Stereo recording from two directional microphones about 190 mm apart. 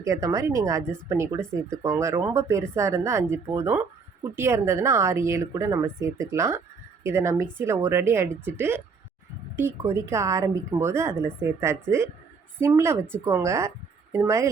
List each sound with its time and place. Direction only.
0.0 s speech: 15° right (ahead or behind)